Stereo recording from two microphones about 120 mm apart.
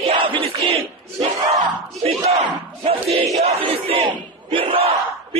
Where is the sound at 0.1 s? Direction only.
45° right (ahead or behind).